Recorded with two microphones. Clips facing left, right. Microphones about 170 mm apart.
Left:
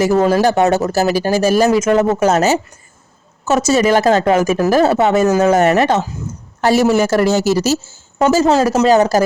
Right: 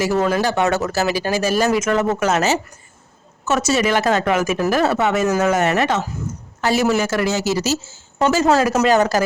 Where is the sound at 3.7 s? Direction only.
40° left (ahead or behind).